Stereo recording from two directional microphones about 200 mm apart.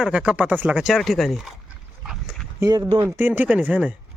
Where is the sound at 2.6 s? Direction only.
20° right (ahead or behind).